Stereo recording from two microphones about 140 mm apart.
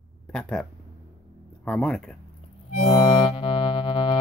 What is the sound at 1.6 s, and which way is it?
Speech, 5° left (ahead or behind).